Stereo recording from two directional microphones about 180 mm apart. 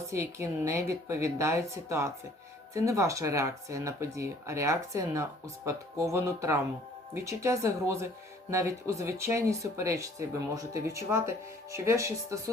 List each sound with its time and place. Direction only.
0.1 s speech: 15° right (ahead or behind)